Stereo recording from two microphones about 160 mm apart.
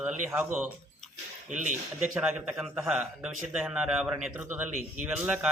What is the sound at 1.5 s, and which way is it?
Speech, 50° right (ahead or behind).